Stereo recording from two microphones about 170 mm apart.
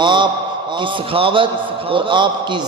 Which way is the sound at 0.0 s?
30° right (ahead or behind).